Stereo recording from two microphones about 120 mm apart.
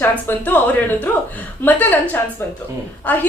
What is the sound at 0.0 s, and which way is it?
A woman's voice, 15° left (ahead or behind).